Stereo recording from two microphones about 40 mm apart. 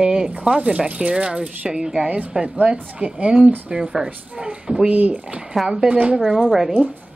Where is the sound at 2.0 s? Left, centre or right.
Right.